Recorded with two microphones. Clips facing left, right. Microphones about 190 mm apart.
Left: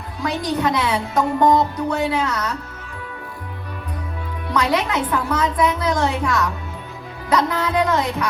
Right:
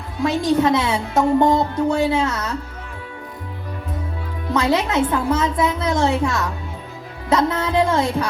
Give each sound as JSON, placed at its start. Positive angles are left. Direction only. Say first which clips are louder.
{"t": 0.2, "sound": "speech", "louder": "right 5 dB", "side_deg": -25}
{"t": 4.4, "sound": "speech", "louder": "right 1 dB", "side_deg": -25}